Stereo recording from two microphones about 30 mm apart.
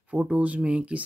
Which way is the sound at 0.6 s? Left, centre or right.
Right.